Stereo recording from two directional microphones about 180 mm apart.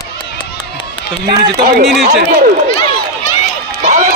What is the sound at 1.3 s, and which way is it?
Speech, 25° right (ahead or behind).